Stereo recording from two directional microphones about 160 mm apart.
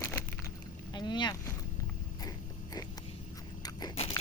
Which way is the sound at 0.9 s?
30° left (ahead or behind).